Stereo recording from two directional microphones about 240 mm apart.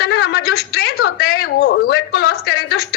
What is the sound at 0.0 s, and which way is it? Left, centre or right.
A woman's voice, left.